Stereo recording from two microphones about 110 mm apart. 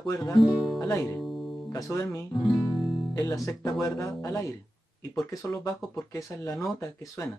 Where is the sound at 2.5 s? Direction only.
40° left (ahead or behind).